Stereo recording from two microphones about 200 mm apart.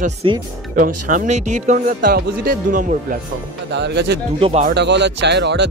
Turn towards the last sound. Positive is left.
turn(degrees=-60)  # may be behind; listen again after turning